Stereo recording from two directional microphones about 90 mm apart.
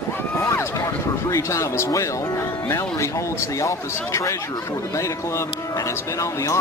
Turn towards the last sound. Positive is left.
turn(degrees=35)  # may be behind; listen again after turning